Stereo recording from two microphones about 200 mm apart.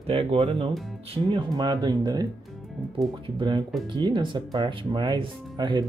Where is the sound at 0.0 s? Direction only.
30° right (ahead or behind).